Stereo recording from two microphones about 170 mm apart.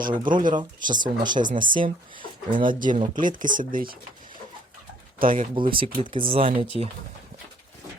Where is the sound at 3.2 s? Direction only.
50° right (ahead or behind).